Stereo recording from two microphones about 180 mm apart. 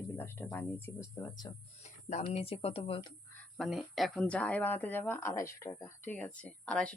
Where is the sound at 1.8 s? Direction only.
40° left (ahead or behind).